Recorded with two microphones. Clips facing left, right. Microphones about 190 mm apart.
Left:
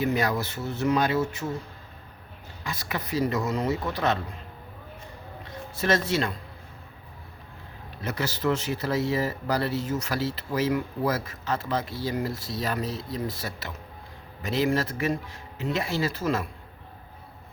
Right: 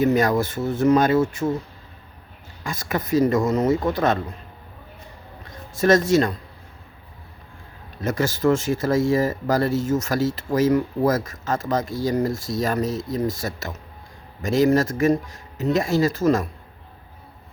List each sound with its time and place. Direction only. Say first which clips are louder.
0.0 s speech: right 7 dB; 45° right (ahead or behind)
2.6 s speech: right 7 dB; 45° right (ahead or behind)
5.7 s speech: right 8 dB; 45° right (ahead or behind)
8.0 s speech: right 7 dB; 45° right (ahead or behind)